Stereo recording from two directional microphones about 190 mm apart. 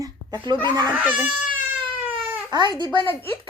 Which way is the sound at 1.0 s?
10° right (ahead or behind).